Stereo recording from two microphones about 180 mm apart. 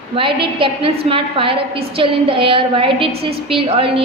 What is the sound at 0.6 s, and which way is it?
A woman's voice, 30° right (ahead or behind).